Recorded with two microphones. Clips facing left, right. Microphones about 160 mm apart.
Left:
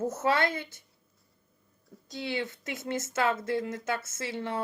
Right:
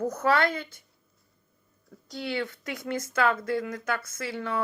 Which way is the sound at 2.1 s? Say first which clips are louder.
Right 2 dB; 20° left (ahead or behind).